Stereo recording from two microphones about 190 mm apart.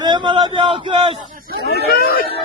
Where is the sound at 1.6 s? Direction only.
55° left (ahead or behind).